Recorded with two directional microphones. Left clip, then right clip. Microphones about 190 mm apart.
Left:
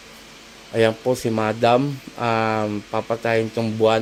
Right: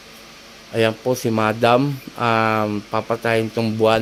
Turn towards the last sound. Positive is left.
turn(degrees=-10)  # may be behind; listen again after turning